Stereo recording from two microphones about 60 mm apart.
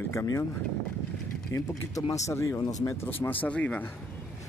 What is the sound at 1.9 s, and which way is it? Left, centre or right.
Speech, left.